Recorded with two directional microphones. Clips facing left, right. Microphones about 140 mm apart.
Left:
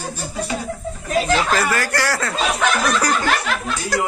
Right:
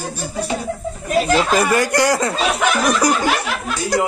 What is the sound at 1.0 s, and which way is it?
A man's voice, 15° right (ahead or behind).